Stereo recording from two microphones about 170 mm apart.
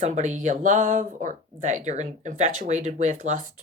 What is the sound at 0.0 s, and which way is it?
Speech, 45° right (ahead or behind).